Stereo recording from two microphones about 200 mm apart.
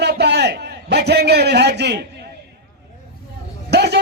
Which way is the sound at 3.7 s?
55° right (ahead or behind).